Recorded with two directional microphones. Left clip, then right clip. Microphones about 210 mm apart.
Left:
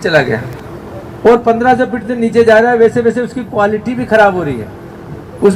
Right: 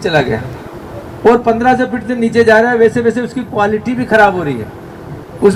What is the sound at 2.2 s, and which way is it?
Speech, 15° right (ahead or behind).